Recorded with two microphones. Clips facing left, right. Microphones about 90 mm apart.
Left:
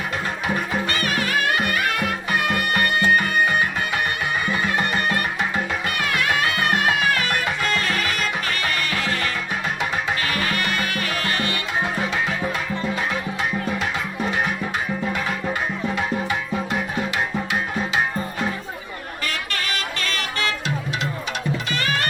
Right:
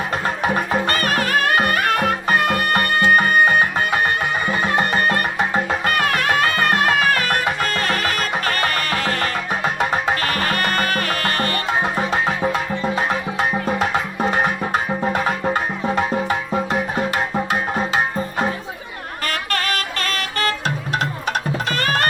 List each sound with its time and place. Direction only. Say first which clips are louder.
0.4 s music: right 5 dB; 40° right (ahead or behind)